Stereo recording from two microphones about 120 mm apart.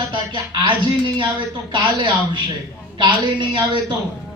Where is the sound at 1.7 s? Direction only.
40° right (ahead or behind).